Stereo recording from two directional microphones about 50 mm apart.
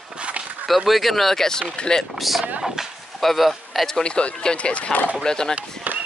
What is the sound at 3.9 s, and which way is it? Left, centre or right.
Speech, centre.